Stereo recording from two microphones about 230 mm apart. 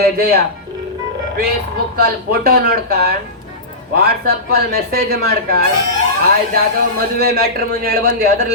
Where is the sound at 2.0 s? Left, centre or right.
Right.